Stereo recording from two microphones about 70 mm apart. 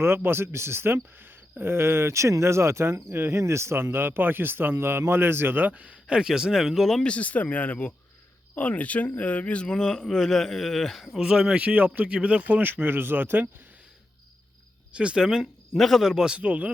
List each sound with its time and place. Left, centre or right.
0.0 s speech: right; by 7.1 s centre
7.1 s speech: centre
11.2 s speech: centre; by 13.5 s right
14.9 s a man's voice: centre